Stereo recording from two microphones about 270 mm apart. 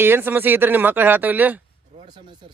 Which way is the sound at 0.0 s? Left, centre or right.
Centre.